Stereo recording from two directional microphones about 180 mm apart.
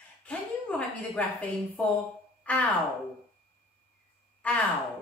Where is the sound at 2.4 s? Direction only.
10° left (ahead or behind).